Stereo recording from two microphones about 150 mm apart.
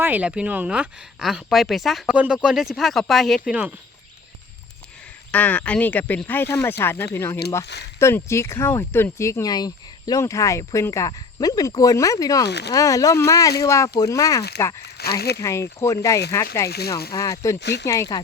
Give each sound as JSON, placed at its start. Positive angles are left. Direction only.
{"t": 0.0, "sound": "speech", "side_deg": -10}
{"t": 5.3, "sound": "speech", "side_deg": 10}
{"t": 14.8, "sound": "speech", "side_deg": 90}
{"t": 15.4, "sound": "speech", "side_deg": 20}
{"t": 16.6, "sound": "speech", "side_deg": 90}
{"t": 17.1, "sound": "speech", "side_deg": 20}